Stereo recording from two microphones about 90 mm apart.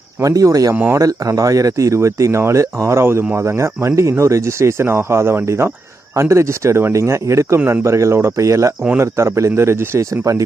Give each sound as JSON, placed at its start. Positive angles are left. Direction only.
{"t": 0.2, "sound": "speech", "side_deg": -35}
{"t": 0.7, "sound": "speech", "side_deg": -25}
{"t": 0.9, "sound": "speech", "side_deg": -40}